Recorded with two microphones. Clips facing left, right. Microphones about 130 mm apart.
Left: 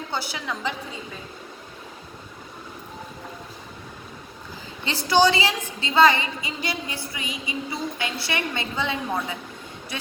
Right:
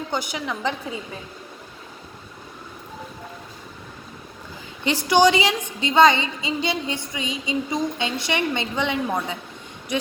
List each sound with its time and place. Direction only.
0.1 s a woman's voice: 15° right (ahead or behind)
4.9 s a woman's voice: 15° right (ahead or behind)